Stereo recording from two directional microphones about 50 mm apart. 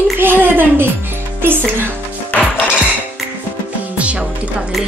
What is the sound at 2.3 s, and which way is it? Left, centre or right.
Music, left.